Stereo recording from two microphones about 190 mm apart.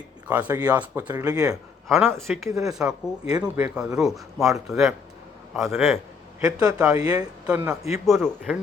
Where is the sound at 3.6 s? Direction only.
5° right (ahead or behind).